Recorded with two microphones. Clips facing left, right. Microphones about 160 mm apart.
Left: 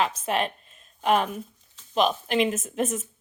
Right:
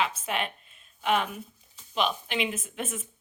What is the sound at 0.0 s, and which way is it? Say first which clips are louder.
A woman's voice: left 4 dB; 40° left (ahead or behind).